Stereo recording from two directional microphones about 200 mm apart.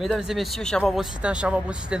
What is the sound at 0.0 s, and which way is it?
Speech, centre (ahead or behind).